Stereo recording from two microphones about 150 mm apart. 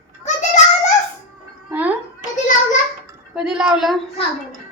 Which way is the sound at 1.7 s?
10° right (ahead or behind).